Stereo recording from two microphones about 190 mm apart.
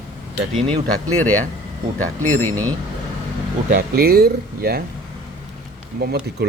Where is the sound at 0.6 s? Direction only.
30° right (ahead or behind).